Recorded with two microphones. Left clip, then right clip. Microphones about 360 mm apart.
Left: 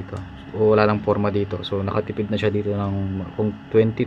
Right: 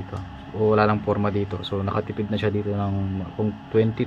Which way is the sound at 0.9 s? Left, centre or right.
Left.